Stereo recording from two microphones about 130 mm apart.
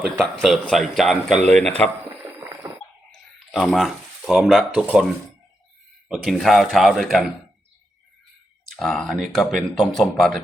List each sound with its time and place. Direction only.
0.0 s speech: 5° left (ahead or behind)
2.0 s boiling: 20° right (ahead or behind)
3.1 s a sound: 5° left (ahead or behind)
6.1 s speech: centre (ahead or behind)
8.7 s speech: 5° left (ahead or behind)